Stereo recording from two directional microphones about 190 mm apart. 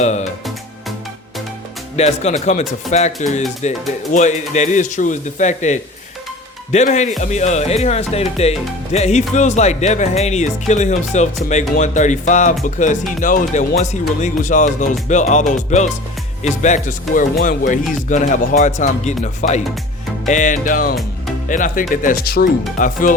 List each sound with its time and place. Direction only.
0.0 s speech: 35° left (ahead or behind)
2.0 s speech: 35° left (ahead or behind)
20.2 s music: 40° left (ahead or behind)